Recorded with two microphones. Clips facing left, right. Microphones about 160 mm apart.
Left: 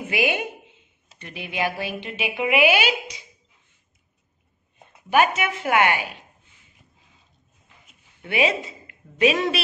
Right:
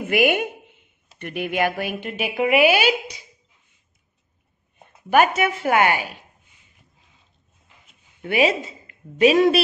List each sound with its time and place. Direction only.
0.1 s speech: 50° right (ahead or behind)
5.1 s a woman's voice: 45° right (ahead or behind)
8.2 s a woman's voice: 40° right (ahead or behind)